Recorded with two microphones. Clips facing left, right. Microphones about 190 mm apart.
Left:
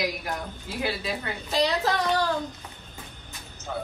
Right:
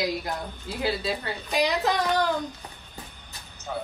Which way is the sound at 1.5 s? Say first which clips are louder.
Even; 15° right (ahead or behind).